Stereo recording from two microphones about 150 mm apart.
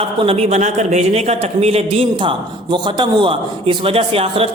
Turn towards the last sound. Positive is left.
turn(degrees=-40)  # may be behind; listen again after turning